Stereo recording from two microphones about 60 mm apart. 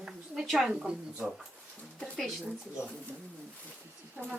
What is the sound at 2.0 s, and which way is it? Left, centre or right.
Speech, centre.